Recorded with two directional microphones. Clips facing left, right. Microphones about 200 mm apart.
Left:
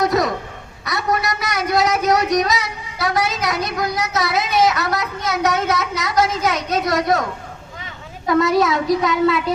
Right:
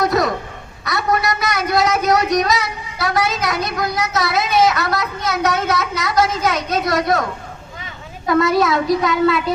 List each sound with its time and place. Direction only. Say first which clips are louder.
0.0 s a sound: right 1 dB; 15° left (ahead or behind)
1.4 s speech: right 1 dB; 15° left (ahead or behind)
8.3 s speech: right 1 dB; 15° left (ahead or behind)